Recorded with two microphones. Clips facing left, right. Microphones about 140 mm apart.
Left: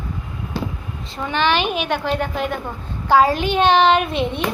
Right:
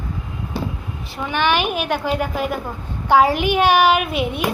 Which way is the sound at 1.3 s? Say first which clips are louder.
Even; 10° right (ahead or behind).